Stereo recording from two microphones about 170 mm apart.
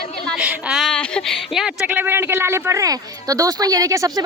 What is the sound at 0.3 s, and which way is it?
A woman's voice, 5° right (ahead or behind).